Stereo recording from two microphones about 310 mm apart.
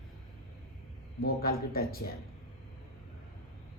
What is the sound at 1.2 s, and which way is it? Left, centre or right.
Speech, left.